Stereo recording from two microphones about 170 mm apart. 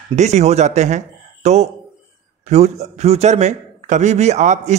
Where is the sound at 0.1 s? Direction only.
40° right (ahead or behind).